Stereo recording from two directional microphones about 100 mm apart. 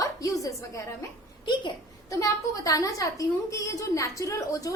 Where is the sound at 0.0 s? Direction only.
35° left (ahead or behind).